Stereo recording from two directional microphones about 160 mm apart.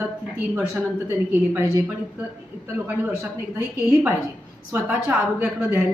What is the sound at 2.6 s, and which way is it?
A woman's voice, 15° right (ahead or behind).